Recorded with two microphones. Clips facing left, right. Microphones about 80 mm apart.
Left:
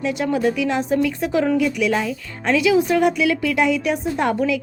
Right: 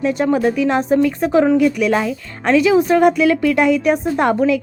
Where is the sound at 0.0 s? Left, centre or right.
Right.